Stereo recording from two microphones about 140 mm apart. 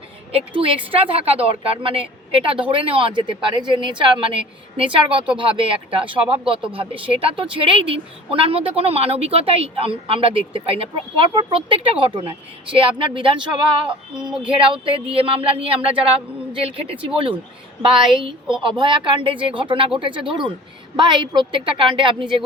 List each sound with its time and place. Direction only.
0.3 s speech: 40° right (ahead or behind)
14.2 s speech: 5° right (ahead or behind)
14.5 s speech: 40° right (ahead or behind)